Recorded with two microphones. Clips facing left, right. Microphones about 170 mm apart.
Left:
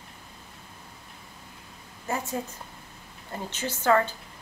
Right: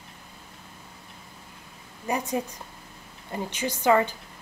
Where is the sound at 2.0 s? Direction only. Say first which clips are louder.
Right 3 dB; 15° right (ahead or behind).